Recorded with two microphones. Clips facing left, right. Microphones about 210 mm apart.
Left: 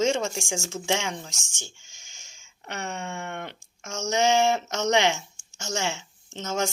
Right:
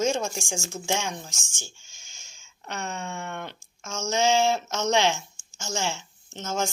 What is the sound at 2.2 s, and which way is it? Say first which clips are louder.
Speech: right 1 dB; 60° left (ahead or behind).